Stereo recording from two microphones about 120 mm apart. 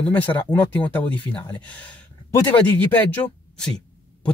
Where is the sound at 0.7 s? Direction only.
15° left (ahead or behind).